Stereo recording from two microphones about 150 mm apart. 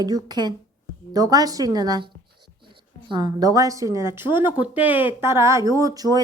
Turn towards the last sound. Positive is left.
turn(degrees=-25)  # may be behind; listen again after turning